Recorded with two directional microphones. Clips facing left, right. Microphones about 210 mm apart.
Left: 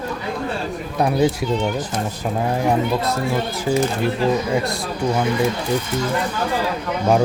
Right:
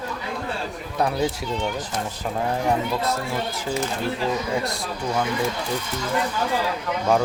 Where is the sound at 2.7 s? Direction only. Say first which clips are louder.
Left 4 dB; 10° left (ahead or behind).